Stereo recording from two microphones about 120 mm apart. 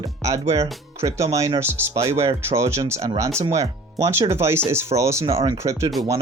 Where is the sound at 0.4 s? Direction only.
60° right (ahead or behind).